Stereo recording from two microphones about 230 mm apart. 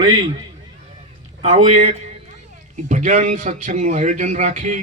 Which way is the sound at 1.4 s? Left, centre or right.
Right.